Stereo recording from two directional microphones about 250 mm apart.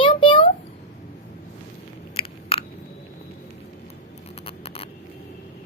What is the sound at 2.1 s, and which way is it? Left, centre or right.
Biting, left.